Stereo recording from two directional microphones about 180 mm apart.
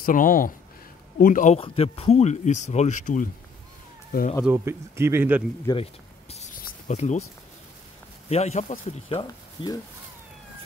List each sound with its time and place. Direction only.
0.0 s speech: 50° left (ahead or behind)
4.5 s speech: 15° right (ahead or behind)
5.7 s speech: 20° left (ahead or behind)
6.6 s a sound: 40° left (ahead or behind)
8.3 s speech: 35° left (ahead or behind)
9.2 s speech: 25° left (ahead or behind)